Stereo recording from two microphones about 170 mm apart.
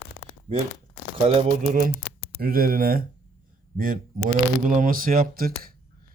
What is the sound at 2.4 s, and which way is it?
Speech, 60° right (ahead or behind).